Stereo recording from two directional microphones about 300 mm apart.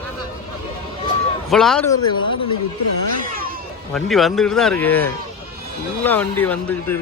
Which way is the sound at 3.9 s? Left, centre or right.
Centre.